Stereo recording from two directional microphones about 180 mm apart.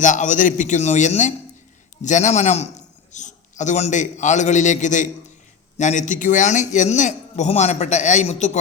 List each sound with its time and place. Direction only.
0.0 s a man's voice: 45° left (ahead or behind)